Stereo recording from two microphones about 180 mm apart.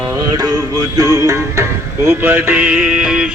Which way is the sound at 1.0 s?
20° right (ahead or behind).